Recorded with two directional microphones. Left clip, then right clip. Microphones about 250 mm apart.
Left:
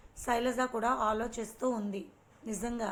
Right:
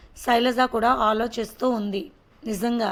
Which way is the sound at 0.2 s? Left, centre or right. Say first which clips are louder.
Right 11 dB; right.